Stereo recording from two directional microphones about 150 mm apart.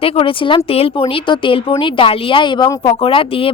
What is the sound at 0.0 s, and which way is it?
Speech, 35° left (ahead or behind).